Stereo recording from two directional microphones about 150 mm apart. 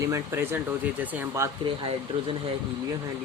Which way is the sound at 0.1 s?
15° right (ahead or behind).